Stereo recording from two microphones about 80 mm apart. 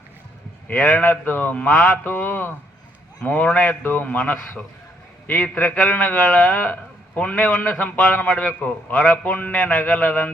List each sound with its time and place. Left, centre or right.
0.7 s a man's voice: left
1.7 s mantra: left
2.1 s a man's voice: left